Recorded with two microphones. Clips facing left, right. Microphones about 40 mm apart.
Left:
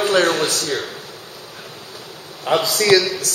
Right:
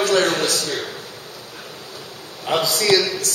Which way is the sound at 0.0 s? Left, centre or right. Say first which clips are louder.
Left 1 dB; centre.